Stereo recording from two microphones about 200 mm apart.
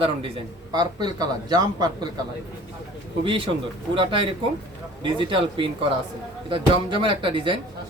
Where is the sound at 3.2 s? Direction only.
25° right (ahead or behind).